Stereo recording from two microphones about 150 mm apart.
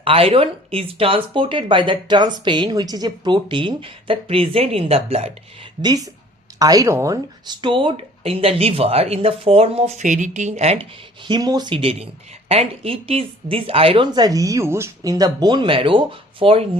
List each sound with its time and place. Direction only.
0.0 s speech: 40° right (ahead or behind)
5.8 s a woman's voice: 25° right (ahead or behind); by 10.8 s 45° right (ahead or behind)
11.3 s speech: 30° right (ahead or behind)